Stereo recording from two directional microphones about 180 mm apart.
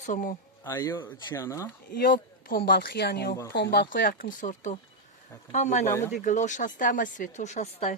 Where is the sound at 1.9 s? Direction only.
60° left (ahead or behind).